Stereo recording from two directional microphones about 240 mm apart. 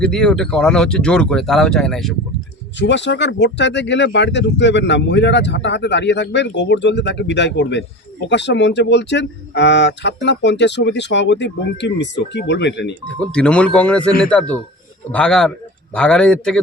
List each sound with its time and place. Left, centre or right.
0.0 s speech: centre
2.7 s speech: left
13.1 s speech: centre